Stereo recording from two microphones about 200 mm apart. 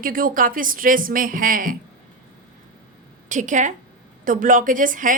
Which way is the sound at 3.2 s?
40° right (ahead or behind).